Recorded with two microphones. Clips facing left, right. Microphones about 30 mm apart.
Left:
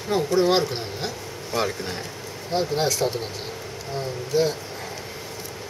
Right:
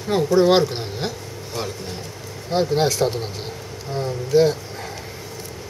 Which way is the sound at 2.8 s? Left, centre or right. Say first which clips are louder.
Right 3 dB; centre.